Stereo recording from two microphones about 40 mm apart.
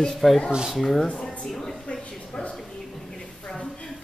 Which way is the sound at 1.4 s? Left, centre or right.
Centre.